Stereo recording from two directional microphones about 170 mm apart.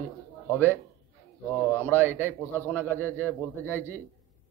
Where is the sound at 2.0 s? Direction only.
15° right (ahead or behind).